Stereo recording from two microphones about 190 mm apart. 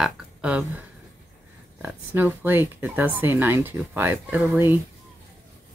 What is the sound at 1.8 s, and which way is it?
Speech, 10° right (ahead or behind).